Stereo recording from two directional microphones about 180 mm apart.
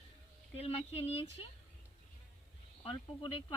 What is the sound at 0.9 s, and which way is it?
Speech, 35° left (ahead or behind).